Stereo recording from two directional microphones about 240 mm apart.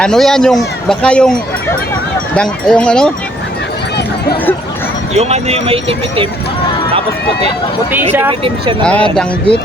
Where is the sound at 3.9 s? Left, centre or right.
Left.